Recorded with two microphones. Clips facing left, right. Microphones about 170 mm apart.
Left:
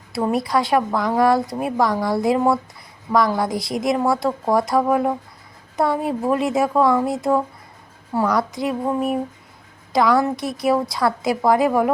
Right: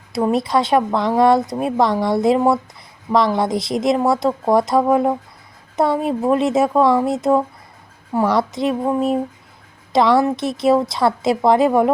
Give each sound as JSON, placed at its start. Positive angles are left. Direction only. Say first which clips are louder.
{"t": 0.3, "sound": "a woman's voice", "louder": "right 2 dB", "side_deg": -25}